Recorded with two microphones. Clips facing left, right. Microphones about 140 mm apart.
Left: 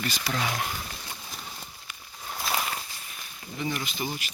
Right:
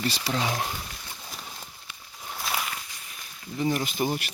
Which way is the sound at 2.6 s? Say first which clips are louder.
Left 2 dB; 35° left (ahead or behind).